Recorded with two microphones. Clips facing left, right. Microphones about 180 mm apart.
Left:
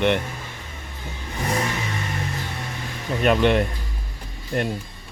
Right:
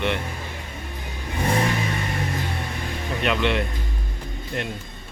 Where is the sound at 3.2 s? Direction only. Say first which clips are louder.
Left 5 dB; 45° left (ahead or behind).